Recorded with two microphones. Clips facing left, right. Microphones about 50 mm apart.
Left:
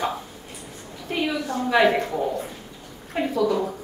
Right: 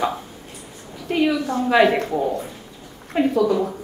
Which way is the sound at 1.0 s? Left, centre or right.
Right.